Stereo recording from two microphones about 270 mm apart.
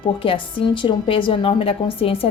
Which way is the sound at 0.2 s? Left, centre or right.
Centre.